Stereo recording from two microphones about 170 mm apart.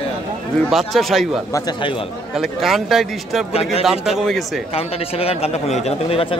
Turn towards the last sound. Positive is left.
turn(degrees=35)  # may be behind; listen again after turning